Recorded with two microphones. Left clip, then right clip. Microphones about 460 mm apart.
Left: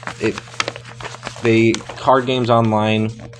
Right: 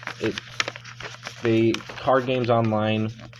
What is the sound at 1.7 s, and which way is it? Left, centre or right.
Speech, right.